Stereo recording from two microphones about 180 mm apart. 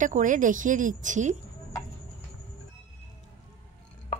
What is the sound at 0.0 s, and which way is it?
A woman's voice, 45° right (ahead or behind).